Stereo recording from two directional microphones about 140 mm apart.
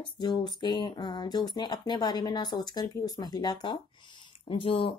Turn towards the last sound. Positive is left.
turn(degrees=40)  # may be behind; listen again after turning